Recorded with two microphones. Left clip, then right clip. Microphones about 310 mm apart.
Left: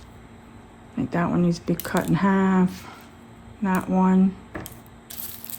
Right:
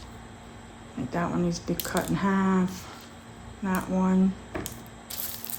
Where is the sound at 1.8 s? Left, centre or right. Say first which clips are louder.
Left 5 dB; left.